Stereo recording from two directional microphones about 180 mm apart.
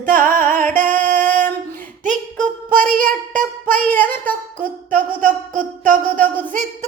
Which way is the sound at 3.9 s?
10° left (ahead or behind).